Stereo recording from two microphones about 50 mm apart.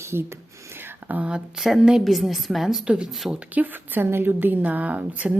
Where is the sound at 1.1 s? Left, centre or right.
Right.